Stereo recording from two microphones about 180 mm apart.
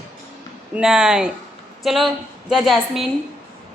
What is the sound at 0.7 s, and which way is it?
A woman's voice, 5° right (ahead or behind).